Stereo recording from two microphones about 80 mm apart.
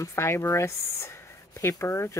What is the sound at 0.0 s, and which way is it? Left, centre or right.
Speech, left.